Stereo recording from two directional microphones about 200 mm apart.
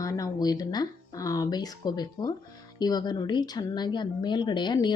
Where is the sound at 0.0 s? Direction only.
15° left (ahead or behind).